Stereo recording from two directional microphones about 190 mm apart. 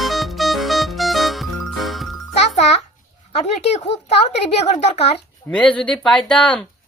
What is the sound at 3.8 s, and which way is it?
A child's voice, 35° left (ahead or behind).